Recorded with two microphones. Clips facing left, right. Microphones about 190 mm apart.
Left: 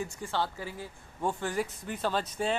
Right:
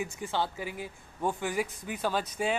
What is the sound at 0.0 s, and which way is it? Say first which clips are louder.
Speech: right 1 dB; 15° right (ahead or behind).